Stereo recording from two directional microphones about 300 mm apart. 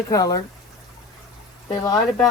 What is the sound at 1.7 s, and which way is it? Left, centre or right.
Speech, centre.